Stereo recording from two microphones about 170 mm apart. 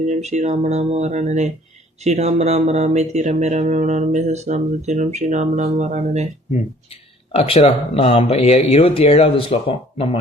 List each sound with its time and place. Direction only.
0.0 s speech: 45° right (ahead or behind)
6.5 s speech: 35° left (ahead or behind)